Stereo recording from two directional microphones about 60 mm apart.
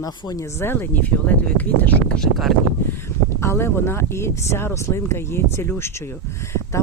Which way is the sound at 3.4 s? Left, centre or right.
Left.